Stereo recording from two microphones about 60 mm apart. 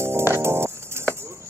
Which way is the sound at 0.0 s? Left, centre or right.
Right.